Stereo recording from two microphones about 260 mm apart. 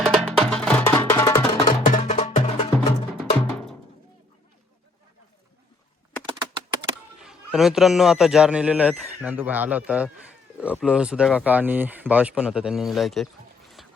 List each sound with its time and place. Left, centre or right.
0.0 s music: centre
1.6 s music: left
3.2 s music: centre
7.2 s a man's voice: centre
13.8 s a sound: centre